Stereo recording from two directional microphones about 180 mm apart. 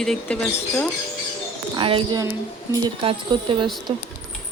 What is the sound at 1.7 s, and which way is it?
Speech, 30° right (ahead or behind).